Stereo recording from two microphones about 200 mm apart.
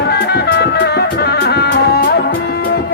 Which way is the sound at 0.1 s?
55° left (ahead or behind).